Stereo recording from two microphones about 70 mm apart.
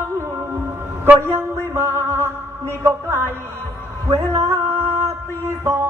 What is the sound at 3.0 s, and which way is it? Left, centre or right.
Speech, right.